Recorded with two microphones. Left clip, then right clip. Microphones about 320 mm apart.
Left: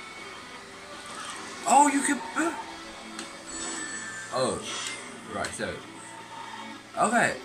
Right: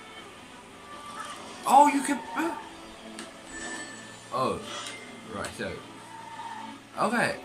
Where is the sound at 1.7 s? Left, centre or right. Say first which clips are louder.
Right 1 dB; centre.